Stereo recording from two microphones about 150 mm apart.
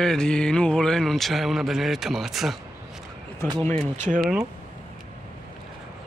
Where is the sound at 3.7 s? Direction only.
50° right (ahead or behind).